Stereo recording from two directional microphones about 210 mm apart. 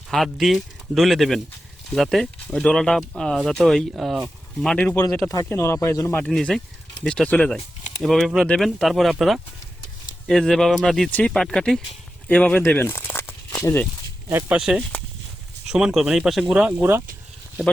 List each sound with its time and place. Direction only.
0.1 s speech: centre (ahead or behind)
14.3 s speech: 10° right (ahead or behind)